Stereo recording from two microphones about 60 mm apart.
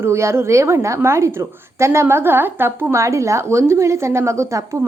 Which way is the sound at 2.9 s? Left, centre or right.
Right.